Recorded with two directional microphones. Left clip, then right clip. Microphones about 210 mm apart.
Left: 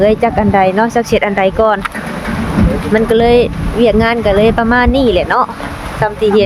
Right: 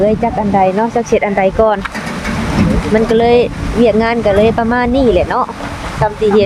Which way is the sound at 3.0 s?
10° left (ahead or behind).